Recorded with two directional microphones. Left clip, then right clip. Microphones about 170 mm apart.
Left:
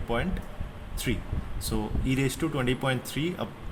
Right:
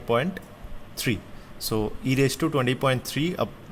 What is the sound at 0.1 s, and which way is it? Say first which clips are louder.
Speech: right 6 dB; 55° right (ahead or behind).